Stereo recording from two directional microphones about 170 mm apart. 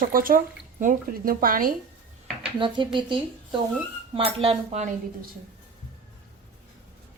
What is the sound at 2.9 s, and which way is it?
A woman's voice, 30° right (ahead or behind).